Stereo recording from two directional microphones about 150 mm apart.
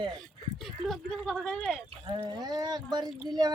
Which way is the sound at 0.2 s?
Centre (ahead or behind).